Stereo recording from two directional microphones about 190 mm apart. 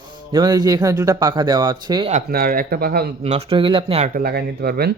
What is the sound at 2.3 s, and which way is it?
Speech, 50° right (ahead or behind).